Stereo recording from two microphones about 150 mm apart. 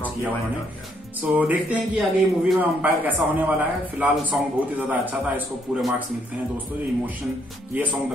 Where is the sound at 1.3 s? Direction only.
10° right (ahead or behind).